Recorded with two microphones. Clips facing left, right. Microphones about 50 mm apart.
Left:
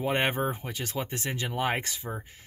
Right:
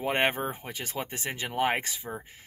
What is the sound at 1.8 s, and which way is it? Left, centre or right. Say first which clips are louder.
Speech: left 1 dB; centre.